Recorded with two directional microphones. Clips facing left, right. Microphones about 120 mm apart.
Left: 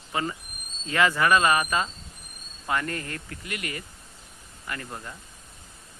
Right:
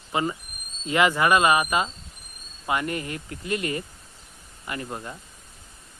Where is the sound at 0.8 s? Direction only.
15° right (ahead or behind).